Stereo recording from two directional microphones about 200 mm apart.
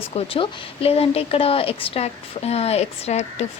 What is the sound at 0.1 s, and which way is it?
A woman's voice, 30° left (ahead or behind).